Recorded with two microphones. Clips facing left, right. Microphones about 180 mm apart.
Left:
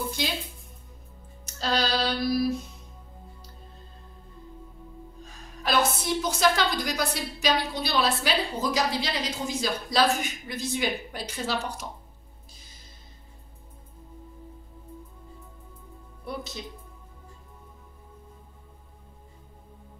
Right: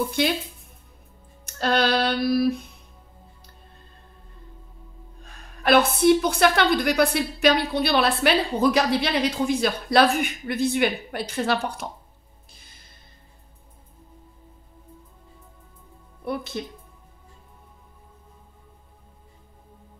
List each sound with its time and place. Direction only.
0.2 s a woman's voice: 65° right (ahead or behind)
1.4 s music: 60° right (ahead or behind)
5.2 s a woman's voice: 60° right (ahead or behind)
16.3 s a woman's voice: 60° right (ahead or behind)